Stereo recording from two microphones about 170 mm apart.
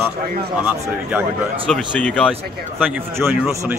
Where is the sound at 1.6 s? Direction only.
5° left (ahead or behind).